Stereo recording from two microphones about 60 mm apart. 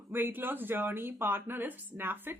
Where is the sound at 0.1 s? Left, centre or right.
Right.